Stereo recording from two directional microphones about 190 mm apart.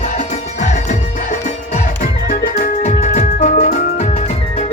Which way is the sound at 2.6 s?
40° left (ahead or behind).